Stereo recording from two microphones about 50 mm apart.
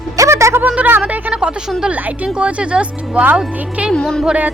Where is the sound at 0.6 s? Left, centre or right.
Right.